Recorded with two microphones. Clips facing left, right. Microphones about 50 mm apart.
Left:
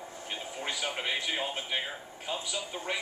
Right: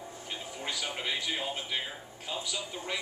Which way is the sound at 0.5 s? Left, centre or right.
Centre.